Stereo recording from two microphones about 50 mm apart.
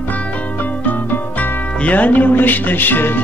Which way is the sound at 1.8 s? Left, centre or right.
Left.